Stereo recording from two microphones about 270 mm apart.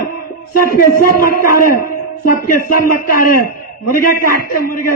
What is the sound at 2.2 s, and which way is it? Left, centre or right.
A man's voice, left.